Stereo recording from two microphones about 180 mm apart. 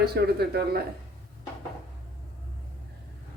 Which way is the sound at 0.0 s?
60° right (ahead or behind).